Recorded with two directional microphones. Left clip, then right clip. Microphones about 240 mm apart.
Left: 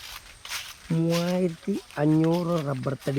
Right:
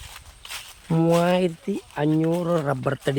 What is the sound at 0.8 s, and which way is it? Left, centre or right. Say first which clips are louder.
Speech: right 8 dB; centre.